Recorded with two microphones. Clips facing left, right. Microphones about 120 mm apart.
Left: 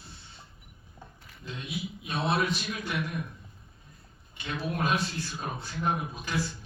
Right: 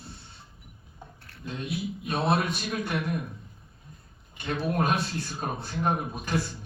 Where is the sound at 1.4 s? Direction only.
50° right (ahead or behind).